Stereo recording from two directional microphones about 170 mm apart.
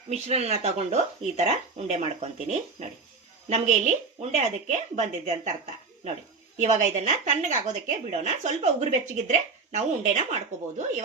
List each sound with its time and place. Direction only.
0.1 s a woman's voice: 40° right (ahead or behind)
6.6 s a woman's voice: 45° right (ahead or behind)